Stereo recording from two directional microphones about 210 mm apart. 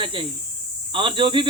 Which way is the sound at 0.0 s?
25° right (ahead or behind).